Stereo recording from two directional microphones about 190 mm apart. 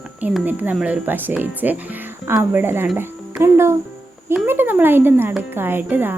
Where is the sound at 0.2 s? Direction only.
5° right (ahead or behind).